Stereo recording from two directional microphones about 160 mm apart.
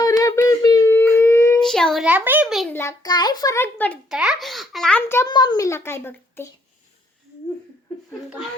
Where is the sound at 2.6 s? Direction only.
15° left (ahead or behind).